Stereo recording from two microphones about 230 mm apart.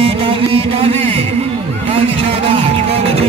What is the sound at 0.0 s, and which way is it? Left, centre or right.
Music, right.